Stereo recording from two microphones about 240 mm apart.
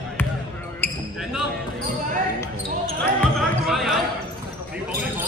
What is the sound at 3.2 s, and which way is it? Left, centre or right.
Basketball bounce, centre.